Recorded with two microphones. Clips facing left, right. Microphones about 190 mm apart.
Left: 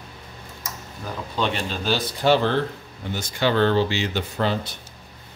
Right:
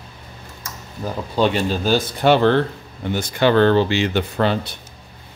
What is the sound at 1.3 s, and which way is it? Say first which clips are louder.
Speech: right 7 dB; 40° right (ahead or behind).